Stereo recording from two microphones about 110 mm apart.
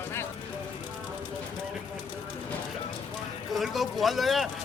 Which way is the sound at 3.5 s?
Centre (ahead or behind).